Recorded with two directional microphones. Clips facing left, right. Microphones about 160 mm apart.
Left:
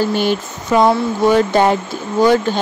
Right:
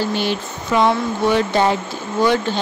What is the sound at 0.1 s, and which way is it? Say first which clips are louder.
Speech: left 4 dB; 50° left (ahead or behind).